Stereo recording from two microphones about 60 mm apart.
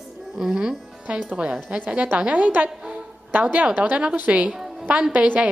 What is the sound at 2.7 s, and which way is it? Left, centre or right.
Music, centre.